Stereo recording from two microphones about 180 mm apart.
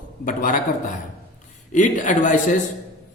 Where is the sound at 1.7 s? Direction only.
45° left (ahead or behind).